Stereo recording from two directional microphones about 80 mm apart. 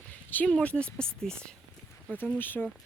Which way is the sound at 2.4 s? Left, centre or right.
Left.